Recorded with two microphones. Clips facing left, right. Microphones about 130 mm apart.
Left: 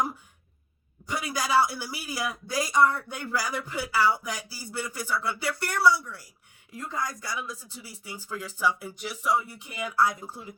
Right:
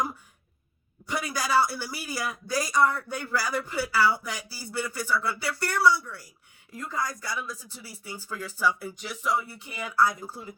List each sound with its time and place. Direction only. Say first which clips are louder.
1.2 s speech: left 1 dB; 15° left (ahead or behind)